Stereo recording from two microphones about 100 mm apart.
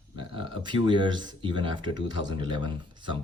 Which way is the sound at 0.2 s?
55° right (ahead or behind).